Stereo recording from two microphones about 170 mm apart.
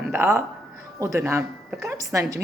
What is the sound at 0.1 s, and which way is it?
Speech, 10° right (ahead or behind).